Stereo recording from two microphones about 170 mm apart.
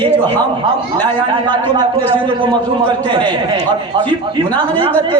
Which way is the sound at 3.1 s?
25° right (ahead or behind).